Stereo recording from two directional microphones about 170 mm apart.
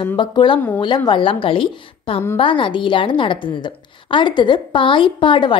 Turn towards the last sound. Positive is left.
turn(degrees=30)  # may be behind; listen again after turning